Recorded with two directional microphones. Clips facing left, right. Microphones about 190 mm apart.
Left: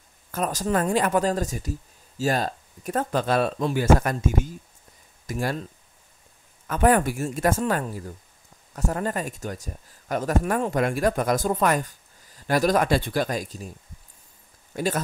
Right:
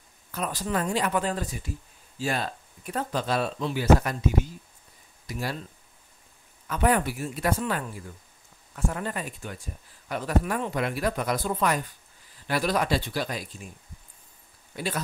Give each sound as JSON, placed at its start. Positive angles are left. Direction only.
{"t": 0.3, "sound": "speech", "side_deg": 45}
{"t": 6.7, "sound": "speech", "side_deg": 45}
{"t": 14.7, "sound": "speech", "side_deg": 45}